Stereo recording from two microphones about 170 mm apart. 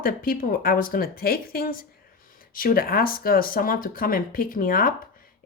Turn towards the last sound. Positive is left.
turn(degrees=55)  # may be behind; listen again after turning